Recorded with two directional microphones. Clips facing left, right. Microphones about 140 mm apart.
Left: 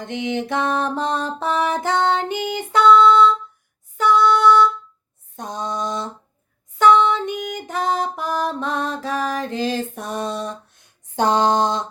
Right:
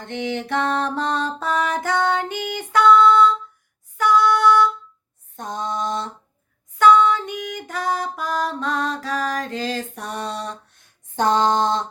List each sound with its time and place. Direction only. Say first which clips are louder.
0.0 s music: left 2 dB; 15° left (ahead or behind)
0.9 s female singing: left 1 dB; 20° left (ahead or behind)
5.4 s mantra: even; 15° left (ahead or behind)
6.7 s music: even; 25° left (ahead or behind)
11.2 s a sound: left 1 dB; 15° left (ahead or behind)